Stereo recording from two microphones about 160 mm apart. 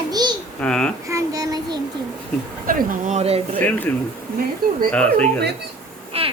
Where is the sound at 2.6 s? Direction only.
60° right (ahead or behind).